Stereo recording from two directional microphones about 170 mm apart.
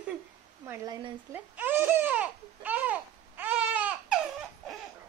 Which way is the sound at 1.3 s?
10° right (ahead or behind).